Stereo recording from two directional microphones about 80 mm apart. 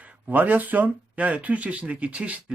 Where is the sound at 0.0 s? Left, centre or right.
Right.